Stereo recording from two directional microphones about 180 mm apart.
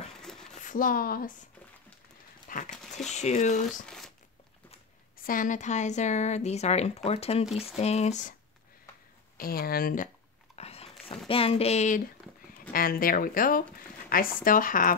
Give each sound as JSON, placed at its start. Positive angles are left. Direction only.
{"t": 0.2, "sound": "a sound", "side_deg": 5}
{"t": 0.6, "sound": "speech", "side_deg": 45}
{"t": 2.7, "sound": "speech", "side_deg": 0}
{"t": 3.1, "sound": "speech", "side_deg": 40}
{"t": 3.8, "sound": "crumpling", "side_deg": 0}
{"t": 5.1, "sound": "speech", "side_deg": 50}
{"t": 9.4, "sound": "speech", "side_deg": 55}
{"t": 10.5, "sound": "a sound", "side_deg": 35}
{"t": 11.2, "sound": "speech", "side_deg": 30}
{"t": 12.7, "sound": "speech", "side_deg": 55}